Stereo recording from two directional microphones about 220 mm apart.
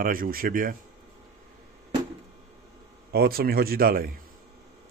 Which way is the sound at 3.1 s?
45° right (ahead or behind).